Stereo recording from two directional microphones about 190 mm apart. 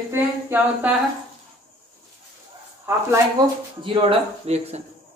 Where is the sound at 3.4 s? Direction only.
20° right (ahead or behind).